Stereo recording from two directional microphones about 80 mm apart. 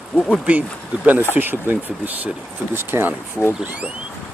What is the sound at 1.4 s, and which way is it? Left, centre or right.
Speech, right.